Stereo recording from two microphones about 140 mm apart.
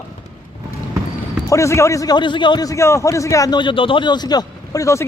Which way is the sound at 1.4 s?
20° left (ahead or behind).